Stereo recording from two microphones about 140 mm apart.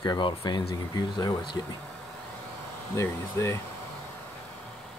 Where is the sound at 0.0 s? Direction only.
30° left (ahead or behind).